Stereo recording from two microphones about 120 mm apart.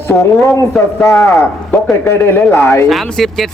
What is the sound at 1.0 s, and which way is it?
Speech, 25° left (ahead or behind).